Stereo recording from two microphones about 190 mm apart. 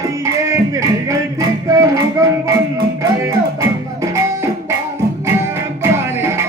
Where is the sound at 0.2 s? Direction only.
15° right (ahead or behind).